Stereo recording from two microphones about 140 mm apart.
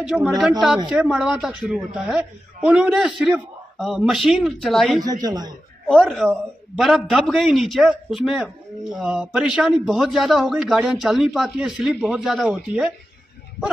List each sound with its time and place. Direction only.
0.0 s speech: 5° right (ahead or behind)
5.0 s a man's voice: 30° right (ahead or behind)
5.9 s speech: centre (ahead or behind)